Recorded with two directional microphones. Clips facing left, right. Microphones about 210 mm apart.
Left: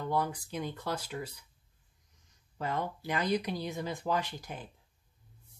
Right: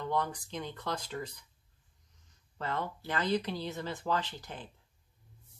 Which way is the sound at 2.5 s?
10° left (ahead or behind).